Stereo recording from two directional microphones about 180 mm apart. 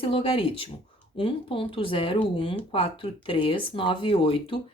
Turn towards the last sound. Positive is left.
turn(degrees=30)  # may be behind; listen again after turning